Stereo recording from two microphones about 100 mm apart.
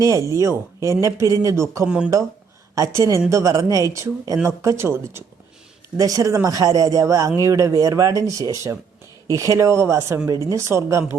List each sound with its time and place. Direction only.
0.0 s speech: 30° right (ahead or behind)